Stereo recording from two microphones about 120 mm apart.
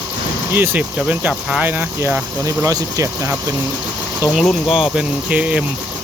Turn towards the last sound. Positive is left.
turn(degrees=-10)  # may be behind; listen again after turning